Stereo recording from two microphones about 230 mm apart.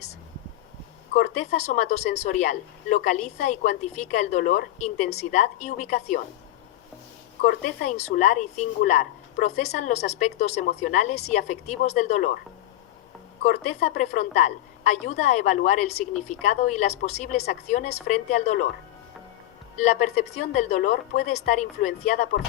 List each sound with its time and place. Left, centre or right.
1.1 s a woman's voice: left
7.4 s a woman's voice: left
13.8 s a woman's voice: left
19.7 s a woman's voice: left